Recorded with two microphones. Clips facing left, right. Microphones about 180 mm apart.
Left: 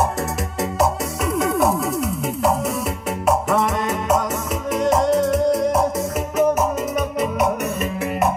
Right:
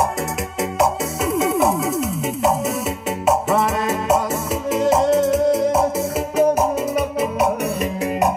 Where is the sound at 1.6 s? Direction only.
Centre (ahead or behind).